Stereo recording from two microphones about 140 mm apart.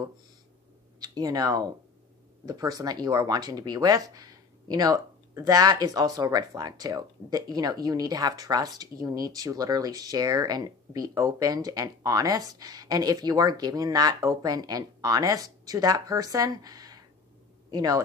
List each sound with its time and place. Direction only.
0.9 s speech: 25° right (ahead or behind)